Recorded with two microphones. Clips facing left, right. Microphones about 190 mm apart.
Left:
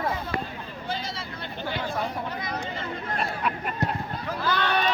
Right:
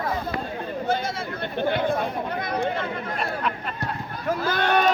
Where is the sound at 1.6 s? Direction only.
55° right (ahead or behind).